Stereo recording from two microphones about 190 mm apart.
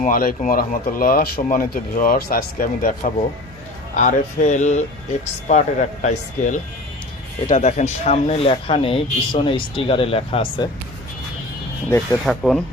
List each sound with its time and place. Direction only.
0.0 s speech: 50° left (ahead or behind); by 10.7 s 30° left (ahead or behind)
12.2 s speech: centre (ahead or behind)